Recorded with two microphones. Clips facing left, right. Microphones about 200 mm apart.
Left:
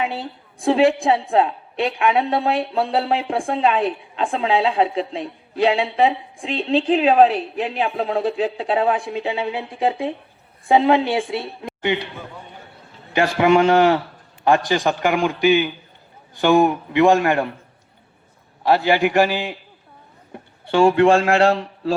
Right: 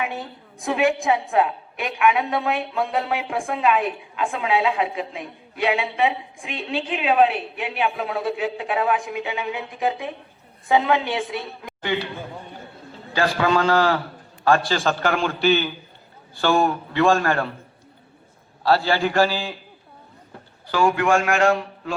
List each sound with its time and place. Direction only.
0.0 s a woman's voice: 30° left (ahead or behind)
13.1 s a woman's voice: 20° left (ahead or behind)
18.6 s a man's voice: 15° left (ahead or behind)